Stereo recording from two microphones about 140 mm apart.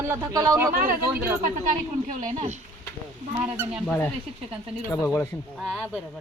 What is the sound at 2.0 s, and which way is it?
Speech, 65° right (ahead or behind).